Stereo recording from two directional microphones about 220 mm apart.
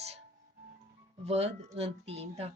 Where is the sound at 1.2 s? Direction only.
30° right (ahead or behind).